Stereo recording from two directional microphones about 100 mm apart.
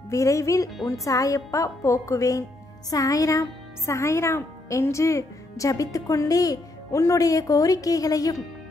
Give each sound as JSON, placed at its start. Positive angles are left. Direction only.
{"t": 0.1, "sound": "speech", "side_deg": 30}